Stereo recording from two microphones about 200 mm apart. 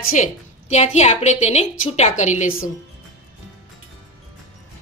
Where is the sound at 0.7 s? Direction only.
35° left (ahead or behind).